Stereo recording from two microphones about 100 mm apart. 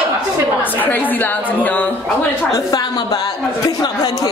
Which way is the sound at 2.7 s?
45° left (ahead or behind).